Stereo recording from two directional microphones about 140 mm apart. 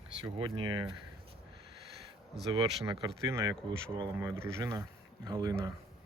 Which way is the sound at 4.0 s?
30° right (ahead or behind).